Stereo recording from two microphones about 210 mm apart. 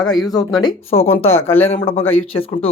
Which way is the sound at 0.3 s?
15° left (ahead or behind).